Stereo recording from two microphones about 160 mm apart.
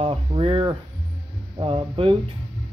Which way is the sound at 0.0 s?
35° right (ahead or behind).